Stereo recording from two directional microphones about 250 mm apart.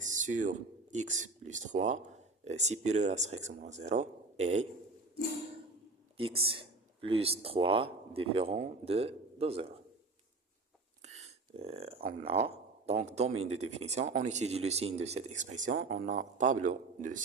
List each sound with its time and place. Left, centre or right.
0.0 s speech: right
6.1 s speech: right
11.0 s speech: right